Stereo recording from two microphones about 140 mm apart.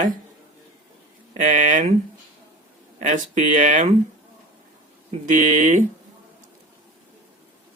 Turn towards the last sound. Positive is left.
turn(degrees=-65)  # may be behind; listen again after turning